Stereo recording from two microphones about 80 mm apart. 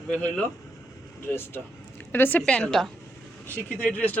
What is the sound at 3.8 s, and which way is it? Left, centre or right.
Speech, centre.